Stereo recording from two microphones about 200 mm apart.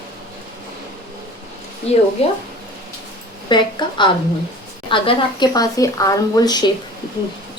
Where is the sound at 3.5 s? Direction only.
25° left (ahead or behind).